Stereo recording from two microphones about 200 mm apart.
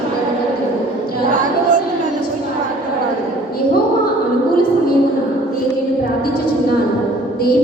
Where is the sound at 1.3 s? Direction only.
40° right (ahead or behind).